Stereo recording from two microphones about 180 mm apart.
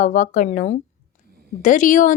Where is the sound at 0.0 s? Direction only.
45° left (ahead or behind).